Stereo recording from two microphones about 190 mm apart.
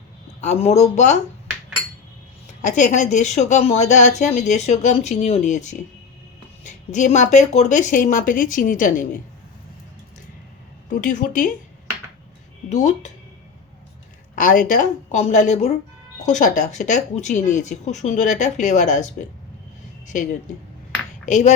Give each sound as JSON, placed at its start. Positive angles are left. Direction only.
{"t": 0.4, "sound": "speech", "side_deg": 35}
{"t": 2.6, "sound": "speech", "side_deg": 40}
{"t": 11.0, "sound": "speech", "side_deg": 45}
{"t": 12.7, "sound": "speech", "side_deg": 40}
{"t": 14.3, "sound": "a woman's voice", "side_deg": 45}
{"t": 21.2, "sound": "speech", "side_deg": 40}